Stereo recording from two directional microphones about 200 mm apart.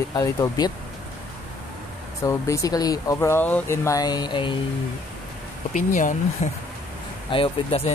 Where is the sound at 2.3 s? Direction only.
15° left (ahead or behind).